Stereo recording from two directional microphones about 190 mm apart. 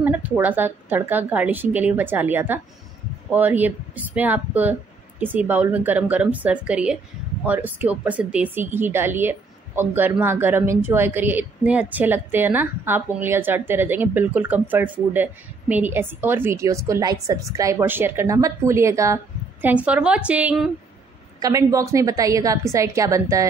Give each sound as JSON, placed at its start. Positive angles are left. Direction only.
{"t": 0.0, "sound": "speech", "side_deg": -10}
{"t": 21.4, "sound": "speech", "side_deg": -20}